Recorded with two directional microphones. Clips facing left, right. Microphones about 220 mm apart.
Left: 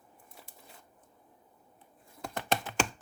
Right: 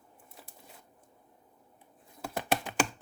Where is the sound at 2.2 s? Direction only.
10° right (ahead or behind).